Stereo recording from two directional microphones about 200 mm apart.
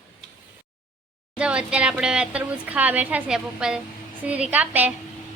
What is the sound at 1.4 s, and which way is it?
A woman's voice, 5° right (ahead or behind).